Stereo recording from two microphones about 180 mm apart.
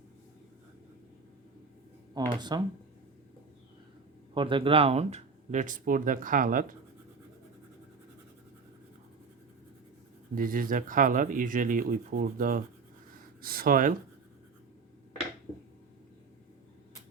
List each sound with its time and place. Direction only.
2.1 s speech: 25° right (ahead or behind)
4.4 s speech: 30° right (ahead or behind); by 6.7 s 50° right (ahead or behind)
10.3 s speech: 50° right (ahead or behind)